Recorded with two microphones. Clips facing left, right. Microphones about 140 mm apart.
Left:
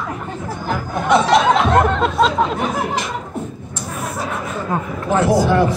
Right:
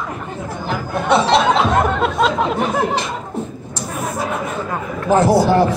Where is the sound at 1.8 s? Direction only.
5° right (ahead or behind).